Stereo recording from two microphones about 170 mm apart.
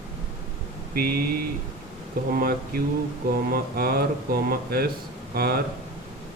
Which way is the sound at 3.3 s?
60° right (ahead or behind).